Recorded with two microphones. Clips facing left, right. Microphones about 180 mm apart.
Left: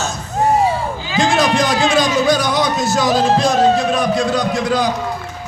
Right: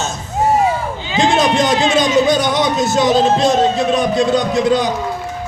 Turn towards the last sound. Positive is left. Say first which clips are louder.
# right 3 dB
turn(degrees=-20)  # may be behind; listen again after turning